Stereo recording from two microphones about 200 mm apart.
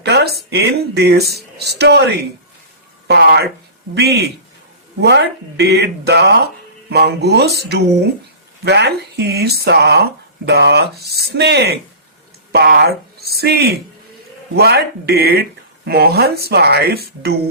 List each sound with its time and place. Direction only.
0.0 s speech: 55° right (ahead or behind)
8.6 s speech: 55° right (ahead or behind)